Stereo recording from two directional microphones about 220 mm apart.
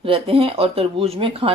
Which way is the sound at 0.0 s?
25° right (ahead or behind).